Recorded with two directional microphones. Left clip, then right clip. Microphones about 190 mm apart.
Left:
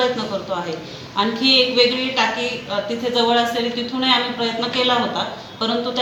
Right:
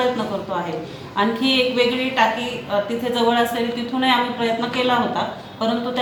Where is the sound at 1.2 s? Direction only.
5° right (ahead or behind).